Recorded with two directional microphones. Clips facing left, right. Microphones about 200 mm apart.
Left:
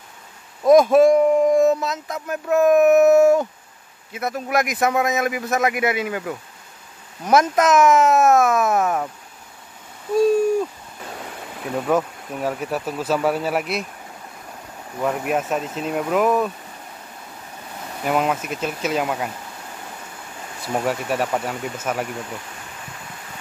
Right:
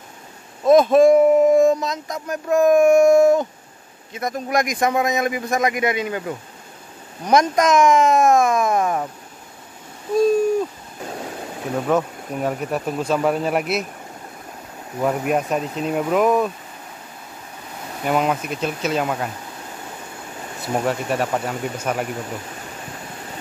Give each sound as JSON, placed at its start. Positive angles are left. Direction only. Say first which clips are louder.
{"t": 0.7, "sound": "speech", "louder": "even", "side_deg": 10}
{"t": 1.1, "sound": "speech", "louder": "right 2 dB", "side_deg": -5}
{"t": 11.7, "sound": "speech", "louder": "even", "side_deg": 0}
{"t": 15.0, "sound": "speech", "louder": "right 2 dB", "side_deg": 0}
{"t": 18.0, "sound": "speech", "louder": "right 1 dB", "side_deg": 0}
{"t": 20.7, "sound": "speech", "louder": "right 1 dB", "side_deg": 5}